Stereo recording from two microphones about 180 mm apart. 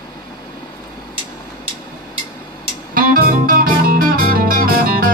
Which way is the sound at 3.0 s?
50° right (ahead or behind).